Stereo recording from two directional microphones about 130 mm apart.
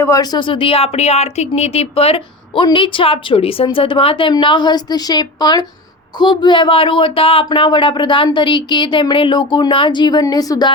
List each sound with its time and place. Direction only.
0.0 s speech: 25° left (ahead or behind)